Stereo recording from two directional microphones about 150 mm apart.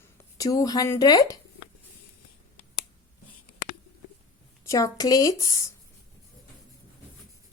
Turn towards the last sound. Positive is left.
turn(degrees=20)  # may be behind; listen again after turning